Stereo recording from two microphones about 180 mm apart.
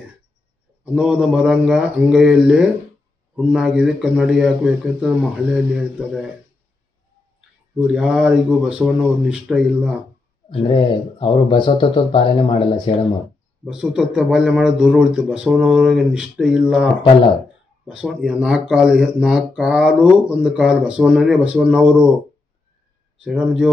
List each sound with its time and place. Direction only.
0.9 s speech: 5° right (ahead or behind)
7.8 s speech: 5° right (ahead or behind)
10.5 s speech: 30° left (ahead or behind)
13.7 s speech: 5° right (ahead or behind)
23.2 s speech: 5° right (ahead or behind)